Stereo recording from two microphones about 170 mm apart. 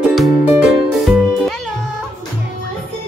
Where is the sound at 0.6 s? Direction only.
Centre (ahead or behind).